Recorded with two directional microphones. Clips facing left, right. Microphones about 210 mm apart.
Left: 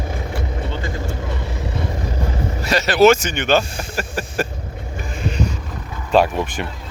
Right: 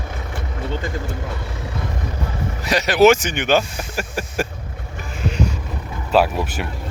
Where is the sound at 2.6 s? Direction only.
15° right (ahead or behind).